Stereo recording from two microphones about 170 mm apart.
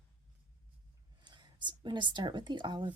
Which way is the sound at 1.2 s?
25° right (ahead or behind).